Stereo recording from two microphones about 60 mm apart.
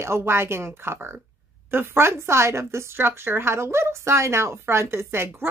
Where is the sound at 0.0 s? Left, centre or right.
Right.